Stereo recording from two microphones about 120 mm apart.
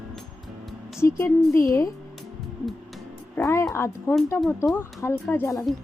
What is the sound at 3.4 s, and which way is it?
Speech, 15° left (ahead or behind).